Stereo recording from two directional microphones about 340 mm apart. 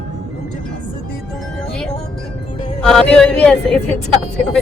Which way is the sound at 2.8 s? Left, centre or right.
Centre.